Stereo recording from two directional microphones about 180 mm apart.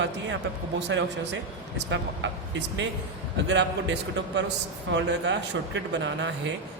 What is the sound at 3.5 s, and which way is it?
A man's voice, 75° right (ahead or behind).